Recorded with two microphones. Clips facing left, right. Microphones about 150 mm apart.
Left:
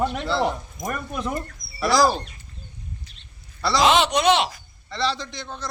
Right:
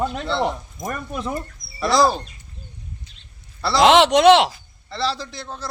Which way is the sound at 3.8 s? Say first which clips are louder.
Right 5 dB; 75° right (ahead or behind).